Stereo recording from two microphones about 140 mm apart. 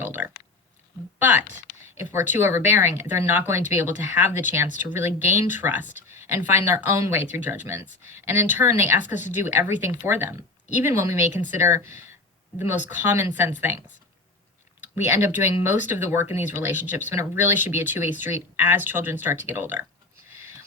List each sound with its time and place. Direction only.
0.0 s a sound: 15° right (ahead or behind)
1.2 s speech: 15° right (ahead or behind)
14.9 s speech: 15° right (ahead or behind)
20.3 s whispering: 15° right (ahead or behind)